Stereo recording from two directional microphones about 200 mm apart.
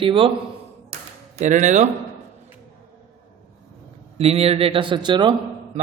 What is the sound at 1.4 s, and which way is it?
Speech, 40° right (ahead or behind).